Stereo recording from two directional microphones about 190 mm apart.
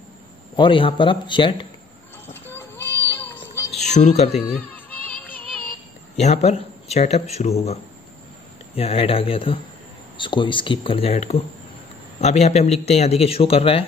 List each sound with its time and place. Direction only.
0.6 s speech: 25° left (ahead or behind)
2.2 s child singing: 10° left (ahead or behind)
3.8 s music: 35° left (ahead or behind)
4.7 s music: 10° left (ahead or behind)
6.1 s speech: 35° left (ahead or behind)